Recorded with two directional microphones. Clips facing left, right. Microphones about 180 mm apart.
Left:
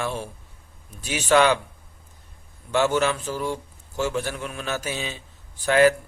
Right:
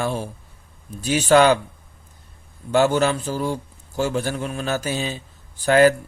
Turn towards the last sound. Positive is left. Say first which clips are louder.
# right 3 dB
turn(degrees=-40)  # may be behind; listen again after turning